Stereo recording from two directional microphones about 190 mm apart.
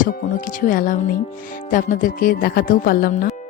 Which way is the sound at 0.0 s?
45° left (ahead or behind).